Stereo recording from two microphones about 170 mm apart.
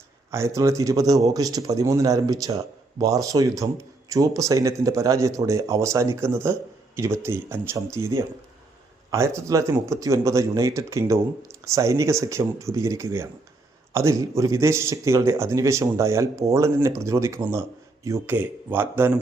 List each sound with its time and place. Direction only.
0.3 s speech: 15° right (ahead or behind)
9.0 s speech: 15° right (ahead or behind)